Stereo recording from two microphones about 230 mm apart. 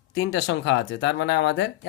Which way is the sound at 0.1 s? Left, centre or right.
Left.